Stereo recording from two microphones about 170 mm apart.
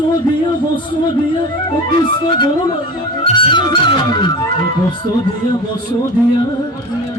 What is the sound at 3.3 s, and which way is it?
Music, 25° left (ahead or behind).